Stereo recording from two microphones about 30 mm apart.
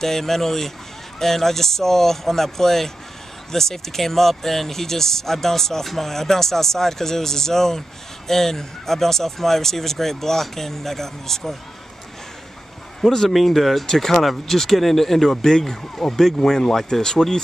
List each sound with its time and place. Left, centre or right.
0.0 s speech: centre
13.0 s speech: centre
13.3 s speech: centre
13.8 s speech: centre